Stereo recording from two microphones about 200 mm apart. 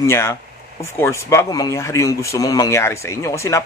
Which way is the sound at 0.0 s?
15° left (ahead or behind).